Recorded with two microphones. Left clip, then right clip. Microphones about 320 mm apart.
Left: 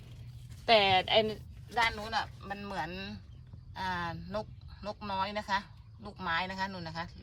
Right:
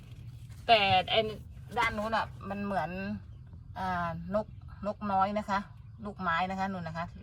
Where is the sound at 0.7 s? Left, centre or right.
Centre.